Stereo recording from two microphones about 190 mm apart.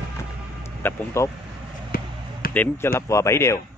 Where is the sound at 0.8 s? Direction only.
15° left (ahead or behind).